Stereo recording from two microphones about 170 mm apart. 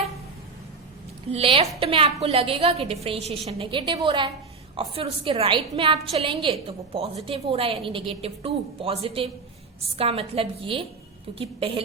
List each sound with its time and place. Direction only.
1.3 s a woman's voice: 35° right (ahead or behind)